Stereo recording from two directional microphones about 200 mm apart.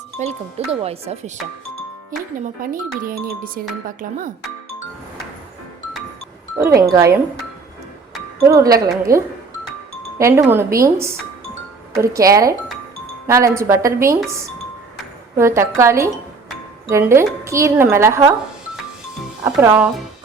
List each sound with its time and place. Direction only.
0.2 s speech: 35° right (ahead or behind)
2.0 s speech: 40° right (ahead or behind)
6.6 s speech: 15° right (ahead or behind)
8.4 s speech: 15° right (ahead or behind)
15.4 s speech: 15° right (ahead or behind)
19.5 s speech: 10° right (ahead or behind)